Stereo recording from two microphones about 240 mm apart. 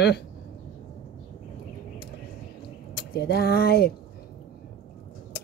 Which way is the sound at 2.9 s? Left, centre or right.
Left.